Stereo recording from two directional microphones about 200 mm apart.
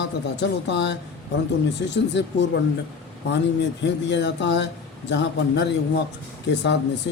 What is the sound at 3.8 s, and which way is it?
Speech, 60° left (ahead or behind).